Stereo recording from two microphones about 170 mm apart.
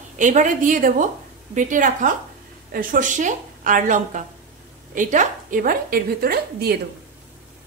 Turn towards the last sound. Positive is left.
turn(degrees=-65)  # may be behind; listen again after turning